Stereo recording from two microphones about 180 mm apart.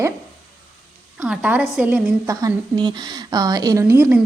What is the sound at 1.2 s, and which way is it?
A woman's voice, 5° right (ahead or behind).